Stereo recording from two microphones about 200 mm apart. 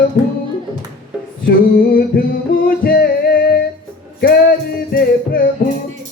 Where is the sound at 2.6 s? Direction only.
50° left (ahead or behind).